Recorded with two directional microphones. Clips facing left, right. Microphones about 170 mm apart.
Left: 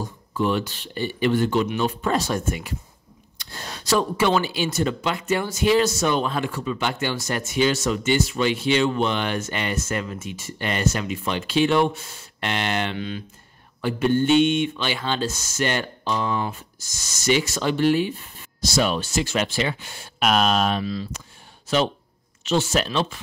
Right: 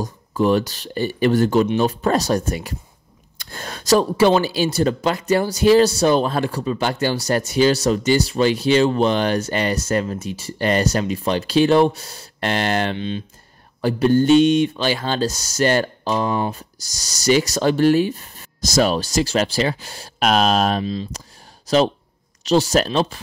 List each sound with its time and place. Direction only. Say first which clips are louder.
0.0 s speech: right 5 dB; 40° right (ahead or behind)
3.3 s speech: right 3 dB; 50° right (ahead or behind)
12.9 s speech: right 4 dB; 25° right (ahead or behind)
13.7 s speech: right 5 dB; 40° right (ahead or behind)
20.8 s speech: right 3 dB; 20° right (ahead or behind)
21.6 s speech: right 5 dB; 35° right (ahead or behind)